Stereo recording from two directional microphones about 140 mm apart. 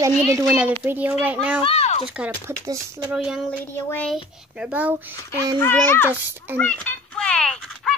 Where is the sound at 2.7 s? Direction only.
25° right (ahead or behind).